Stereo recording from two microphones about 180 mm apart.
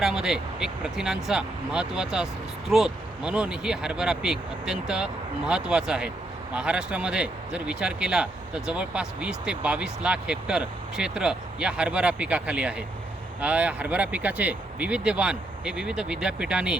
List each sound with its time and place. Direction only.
0.0 s speech: 5° right (ahead or behind)